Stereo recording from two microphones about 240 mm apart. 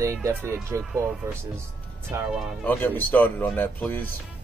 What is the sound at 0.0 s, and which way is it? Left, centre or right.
Speech, centre.